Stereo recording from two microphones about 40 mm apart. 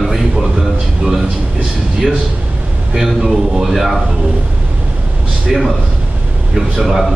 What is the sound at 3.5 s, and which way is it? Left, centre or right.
Speech, centre.